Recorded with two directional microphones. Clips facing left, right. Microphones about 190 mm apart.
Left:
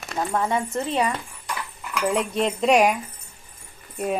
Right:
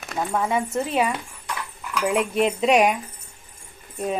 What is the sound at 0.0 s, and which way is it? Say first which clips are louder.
A woman's voice: even; centre (ahead or behind).